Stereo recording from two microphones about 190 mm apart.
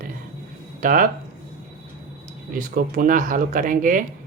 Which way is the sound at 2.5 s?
45° right (ahead or behind).